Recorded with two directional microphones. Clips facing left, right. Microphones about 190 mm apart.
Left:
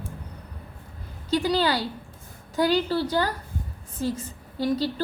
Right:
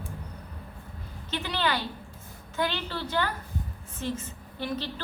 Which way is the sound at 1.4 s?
35° left (ahead or behind).